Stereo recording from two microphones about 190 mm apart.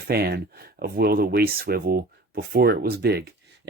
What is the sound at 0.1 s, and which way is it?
Speech, 55° right (ahead or behind).